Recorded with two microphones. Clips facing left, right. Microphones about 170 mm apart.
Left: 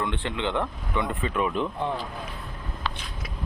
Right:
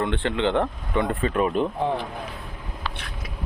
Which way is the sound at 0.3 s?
35° right (ahead or behind).